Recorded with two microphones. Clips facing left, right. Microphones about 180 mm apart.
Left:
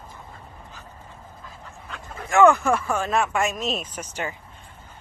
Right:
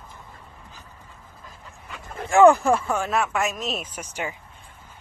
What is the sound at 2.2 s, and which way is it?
Speech, 35° right (ahead or behind).